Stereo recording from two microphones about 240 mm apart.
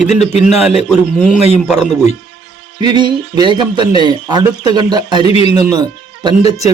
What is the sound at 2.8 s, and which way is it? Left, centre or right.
Speech, centre.